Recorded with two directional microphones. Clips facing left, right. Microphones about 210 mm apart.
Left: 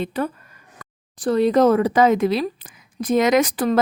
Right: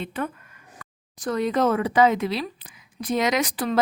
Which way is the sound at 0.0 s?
40° left (ahead or behind).